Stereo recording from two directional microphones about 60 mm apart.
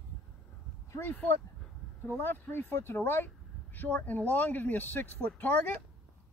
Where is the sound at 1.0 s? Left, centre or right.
Left.